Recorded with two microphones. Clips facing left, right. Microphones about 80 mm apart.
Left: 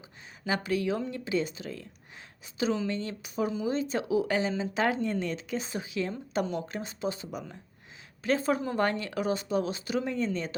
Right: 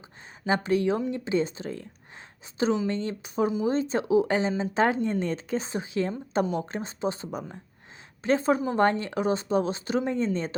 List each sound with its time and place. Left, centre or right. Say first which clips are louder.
0.4 s a woman's voice: right 5 dB; right